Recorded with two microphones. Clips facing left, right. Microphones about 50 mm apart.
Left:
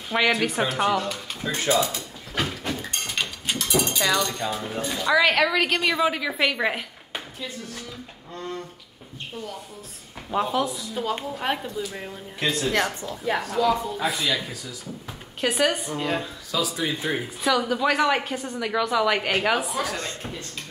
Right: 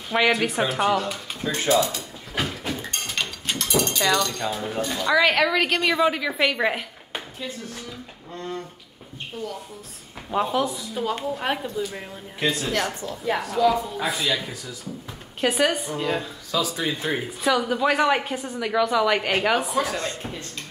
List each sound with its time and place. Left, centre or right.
0.1 s a woman's voice: centre
1.7 s speech: centre
2.0 s mechanisms: centre
10.3 s a woman's voice: centre
15.4 s a woman's voice: centre